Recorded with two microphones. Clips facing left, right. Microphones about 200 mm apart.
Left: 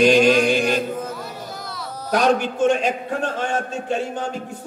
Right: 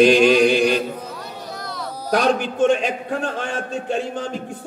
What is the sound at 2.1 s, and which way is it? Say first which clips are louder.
Mantra: even; 40° left (ahead or behind).